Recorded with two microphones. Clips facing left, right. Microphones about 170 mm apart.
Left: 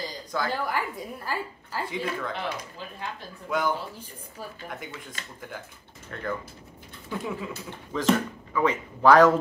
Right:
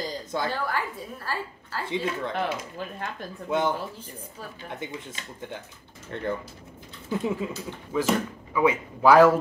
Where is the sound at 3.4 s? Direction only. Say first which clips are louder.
Right 2 dB; 25° right (ahead or behind).